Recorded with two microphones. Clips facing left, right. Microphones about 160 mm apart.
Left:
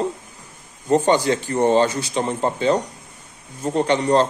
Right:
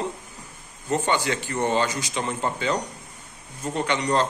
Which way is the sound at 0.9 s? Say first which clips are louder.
Left 7 dB; 35° left (ahead or behind).